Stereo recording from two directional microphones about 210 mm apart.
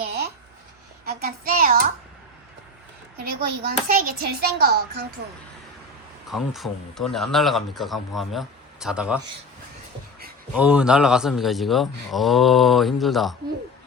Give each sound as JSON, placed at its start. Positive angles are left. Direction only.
{"t": 1.0, "sound": "a sound", "side_deg": -45}
{"t": 3.2, "sound": "a child's voice", "side_deg": -45}
{"t": 6.3, "sound": "speech", "side_deg": 0}
{"t": 10.5, "sound": "speech", "side_deg": -5}